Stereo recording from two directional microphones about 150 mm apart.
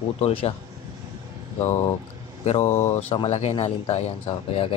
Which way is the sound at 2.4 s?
50° left (ahead or behind).